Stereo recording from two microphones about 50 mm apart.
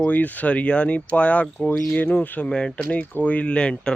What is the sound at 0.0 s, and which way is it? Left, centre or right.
Speech, left.